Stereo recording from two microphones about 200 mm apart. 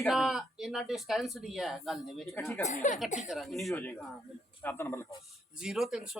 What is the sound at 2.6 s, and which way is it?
Speech, 40° left (ahead or behind).